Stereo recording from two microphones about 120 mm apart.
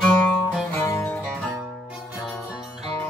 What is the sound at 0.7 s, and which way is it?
Music, 20° left (ahead or behind).